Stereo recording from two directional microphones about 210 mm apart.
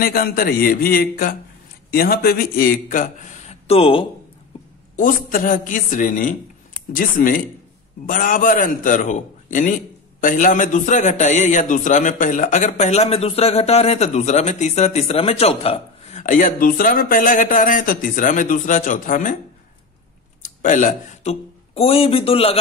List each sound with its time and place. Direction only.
0.0 s a man's voice: 45° left (ahead or behind); by 4.0 s 25° left (ahead or behind)
4.9 s a man's voice: 40° left (ahead or behind)
20.4 s speech: 35° left (ahead or behind)